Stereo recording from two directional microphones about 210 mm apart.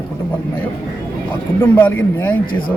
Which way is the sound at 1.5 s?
10° left (ahead or behind).